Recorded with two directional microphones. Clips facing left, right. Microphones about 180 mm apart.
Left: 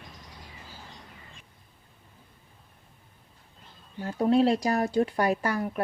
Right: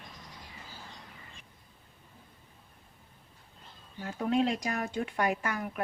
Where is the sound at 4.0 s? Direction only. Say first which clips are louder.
Left 6 dB; 35° left (ahead or behind).